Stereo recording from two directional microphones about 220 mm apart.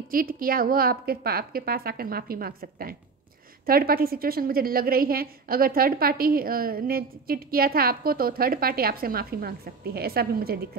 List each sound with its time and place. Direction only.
0.1 s a woman's voice: 40° right (ahead or behind)